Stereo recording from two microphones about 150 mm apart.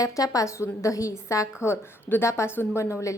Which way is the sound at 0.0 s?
25° left (ahead or behind).